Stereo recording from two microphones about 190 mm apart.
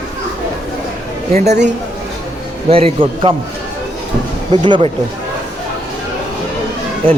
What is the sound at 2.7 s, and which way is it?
Speech, 30° right (ahead or behind).